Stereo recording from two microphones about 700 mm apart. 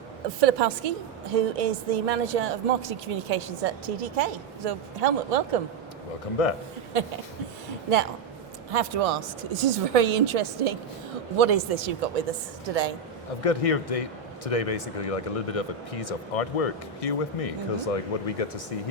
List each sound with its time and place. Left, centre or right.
0.3 s a woman's voice: right
6.4 s a man's voice: left
8.7 s a woman's voice: right
13.4 s a man's voice: left